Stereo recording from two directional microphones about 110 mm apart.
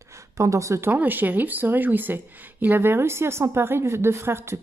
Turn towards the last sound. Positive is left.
turn(degrees=-25)  # may be behind; listen again after turning